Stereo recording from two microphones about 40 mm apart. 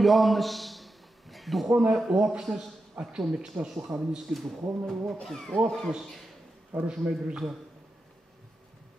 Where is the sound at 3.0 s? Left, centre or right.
Right.